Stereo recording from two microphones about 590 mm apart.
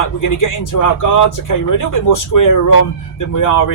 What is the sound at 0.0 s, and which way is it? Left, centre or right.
Speech, left.